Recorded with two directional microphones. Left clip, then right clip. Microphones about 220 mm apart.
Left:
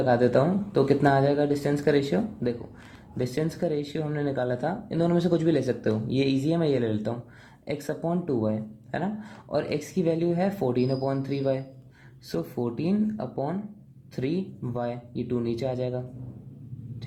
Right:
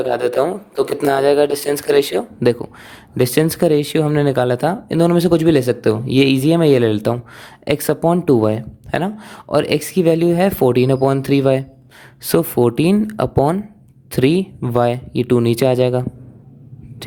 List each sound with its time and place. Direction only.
0.2 s speech: 40° right (ahead or behind)